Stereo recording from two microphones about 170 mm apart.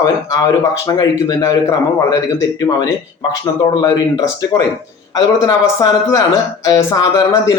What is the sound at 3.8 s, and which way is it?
A man's voice, 25° left (ahead or behind).